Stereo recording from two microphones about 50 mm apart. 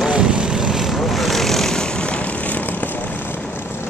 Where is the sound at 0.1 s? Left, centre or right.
Right; by 2.9 s left.